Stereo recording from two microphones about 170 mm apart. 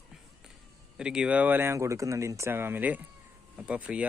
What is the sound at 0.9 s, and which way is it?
Speech, 5° right (ahead or behind).